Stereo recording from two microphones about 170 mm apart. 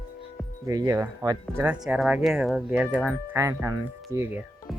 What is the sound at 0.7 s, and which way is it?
Speech, 20° right (ahead or behind).